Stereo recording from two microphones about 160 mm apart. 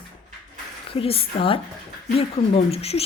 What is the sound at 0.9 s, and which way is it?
Speech, 35° left (ahead or behind).